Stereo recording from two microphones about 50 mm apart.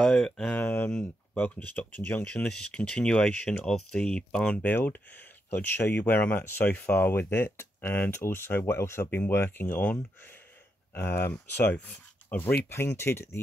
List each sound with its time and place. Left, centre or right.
0.1 s speech: centre
0.5 s speech: left
2.2 s speech: left
9.3 s speech: left
11.0 s speech: left
11.7 s a sound: left
12.4 s speech: left
12.6 s speech: left